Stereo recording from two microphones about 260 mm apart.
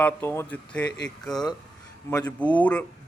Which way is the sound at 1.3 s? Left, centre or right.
Centre.